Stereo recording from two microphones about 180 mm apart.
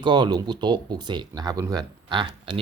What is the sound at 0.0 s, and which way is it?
Speech, 25° right (ahead or behind).